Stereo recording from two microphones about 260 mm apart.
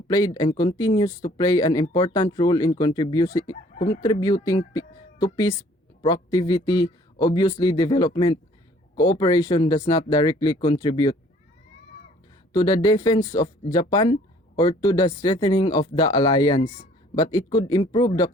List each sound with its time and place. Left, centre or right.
0.3 s speech: centre
3.8 s speech: left
4.0 s speech: centre
12.5 s speech: centre